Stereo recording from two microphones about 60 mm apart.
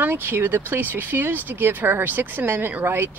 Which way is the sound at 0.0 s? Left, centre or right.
Right.